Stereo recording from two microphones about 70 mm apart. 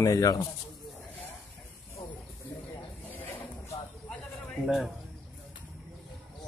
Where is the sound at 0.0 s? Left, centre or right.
Left.